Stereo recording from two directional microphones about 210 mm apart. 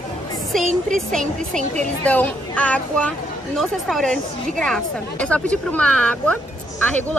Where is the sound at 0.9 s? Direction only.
Centre (ahead or behind).